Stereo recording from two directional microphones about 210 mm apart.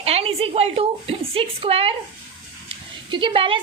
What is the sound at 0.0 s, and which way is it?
A woman's voice, 30° right (ahead or behind).